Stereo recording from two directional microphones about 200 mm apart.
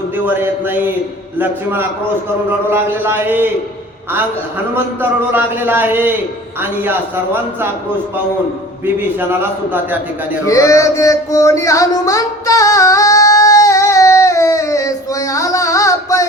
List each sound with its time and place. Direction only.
0.3 s a man's voice: 10° right (ahead or behind)
4.7 s a man's voice: 10° right (ahead or behind)
9.1 s a man's voice: 10° right (ahead or behind)
10.4 s music: 15° left (ahead or behind)